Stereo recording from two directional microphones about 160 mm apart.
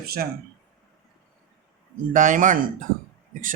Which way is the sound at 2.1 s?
55° right (ahead or behind).